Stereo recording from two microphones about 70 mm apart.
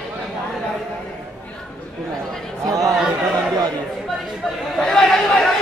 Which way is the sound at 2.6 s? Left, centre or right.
Right.